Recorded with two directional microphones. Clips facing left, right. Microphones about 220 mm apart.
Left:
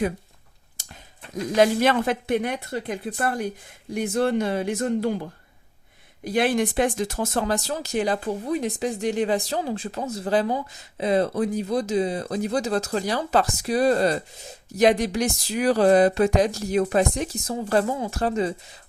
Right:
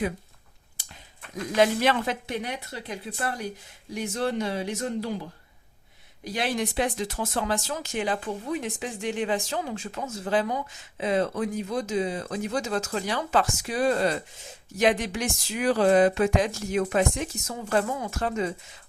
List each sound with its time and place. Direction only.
0.8 s a sound: 45° left (ahead or behind)
1.5 s speech: 45° left (ahead or behind)
6.2 s speech: 55° left (ahead or behind); by 18.5 s 35° left (ahead or behind)